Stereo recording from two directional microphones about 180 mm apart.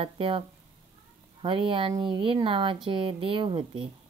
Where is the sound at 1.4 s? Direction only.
30° right (ahead or behind).